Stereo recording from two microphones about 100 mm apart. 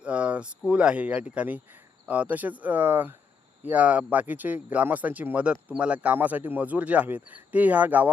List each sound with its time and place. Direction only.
0.0 s speech: 15° right (ahead or behind)